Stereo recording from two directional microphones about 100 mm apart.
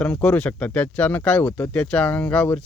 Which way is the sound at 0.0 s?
10° left (ahead or behind).